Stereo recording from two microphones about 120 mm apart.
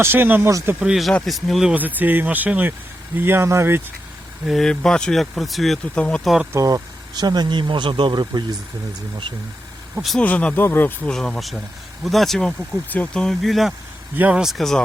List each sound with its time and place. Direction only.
0.0 s speech: 20° right (ahead or behind)
0.8 s speech: 5° right (ahead or behind)
1.7 s speech: 15° right (ahead or behind)
4.4 s speech: 5° left (ahead or behind)
6.5 s speech: 25° right (ahead or behind)
10.0 s speech: centre (ahead or behind)
10.2 s speech: 15° left (ahead or behind)
11.1 s speech: 5° left (ahead or behind)